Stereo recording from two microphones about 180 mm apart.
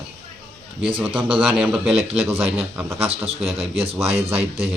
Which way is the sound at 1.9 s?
35° right (ahead or behind).